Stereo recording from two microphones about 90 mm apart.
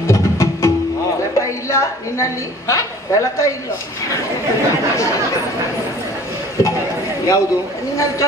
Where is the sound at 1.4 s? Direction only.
35° left (ahead or behind).